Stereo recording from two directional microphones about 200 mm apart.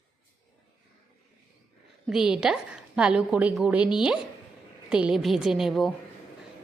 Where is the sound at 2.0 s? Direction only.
5° right (ahead or behind).